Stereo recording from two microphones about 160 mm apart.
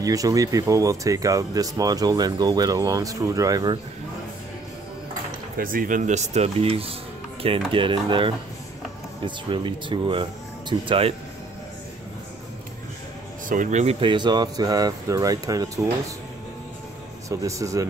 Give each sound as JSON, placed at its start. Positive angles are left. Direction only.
{"t": 0.0, "sound": "speech", "side_deg": -20}
{"t": 5.6, "sound": "speech", "side_deg": -60}
{"t": 13.5, "sound": "speech", "side_deg": -50}
{"t": 17.3, "sound": "speech", "side_deg": -20}